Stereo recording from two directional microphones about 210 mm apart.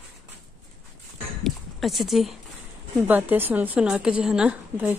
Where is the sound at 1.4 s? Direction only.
Centre (ahead or behind).